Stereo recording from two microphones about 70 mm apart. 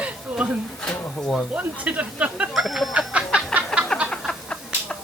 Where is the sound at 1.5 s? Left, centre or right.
Centre.